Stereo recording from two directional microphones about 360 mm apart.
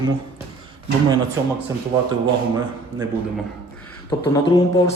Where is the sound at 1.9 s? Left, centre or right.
Centre.